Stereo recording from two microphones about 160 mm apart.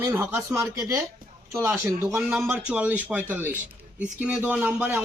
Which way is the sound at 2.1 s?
5° right (ahead or behind).